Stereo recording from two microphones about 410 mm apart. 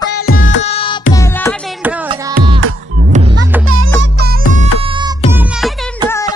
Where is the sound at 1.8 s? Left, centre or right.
Centre; by 4.4 s right.